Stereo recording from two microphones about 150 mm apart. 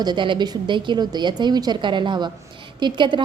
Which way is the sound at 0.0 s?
30° right (ahead or behind).